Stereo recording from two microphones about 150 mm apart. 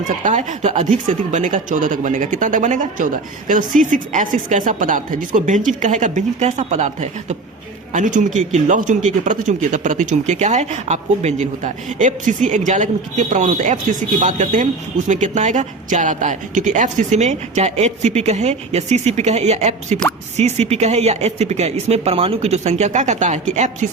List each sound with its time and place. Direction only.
0.1 s speech: 55° right (ahead or behind)